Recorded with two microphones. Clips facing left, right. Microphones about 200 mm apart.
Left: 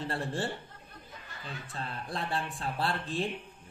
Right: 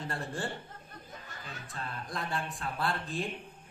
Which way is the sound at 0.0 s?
30° left (ahead or behind).